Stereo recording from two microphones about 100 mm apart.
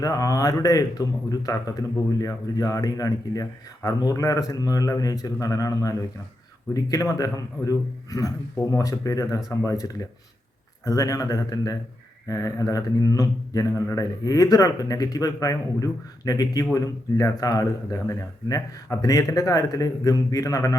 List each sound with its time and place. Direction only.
0.0 s speech: 35° left (ahead or behind)